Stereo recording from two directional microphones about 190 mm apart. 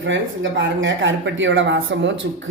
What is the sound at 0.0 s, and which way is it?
Speech, 80° right.